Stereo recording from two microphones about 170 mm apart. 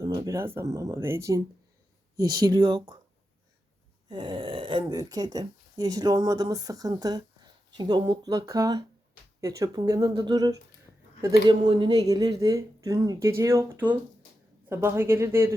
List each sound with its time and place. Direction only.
0.0 s speech: 20° right (ahead or behind)
2.4 s speech: 25° right (ahead or behind)
4.1 s speech: 30° right (ahead or behind)